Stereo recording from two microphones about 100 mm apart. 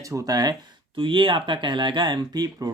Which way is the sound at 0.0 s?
35° right (ahead or behind).